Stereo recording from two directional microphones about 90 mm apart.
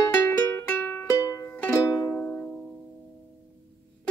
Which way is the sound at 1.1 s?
35° left (ahead or behind).